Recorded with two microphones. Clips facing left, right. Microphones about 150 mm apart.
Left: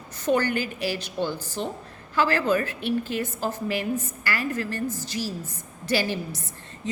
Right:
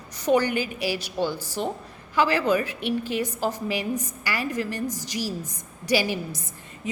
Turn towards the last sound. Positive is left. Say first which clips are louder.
# right 2 dB
turn(degrees=-15)  # may be behind; listen again after turning